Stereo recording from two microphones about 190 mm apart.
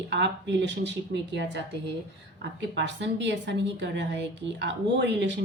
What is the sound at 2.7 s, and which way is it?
A woman's voice, 70° right (ahead or behind).